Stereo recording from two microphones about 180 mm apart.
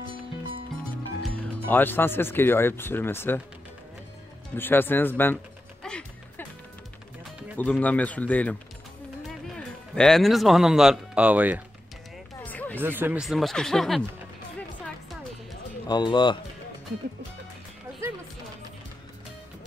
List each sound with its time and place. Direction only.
1.7 s speech: 10° left (ahead or behind)
4.6 s music: 10° left (ahead or behind)
7.5 s speech: 10° left (ahead or behind)
9.9 s speech: centre (ahead or behind)
12.4 s a sound: 10° left (ahead or behind)
12.8 s speech: 10° right (ahead or behind)
15.9 s speech: 25° left (ahead or behind)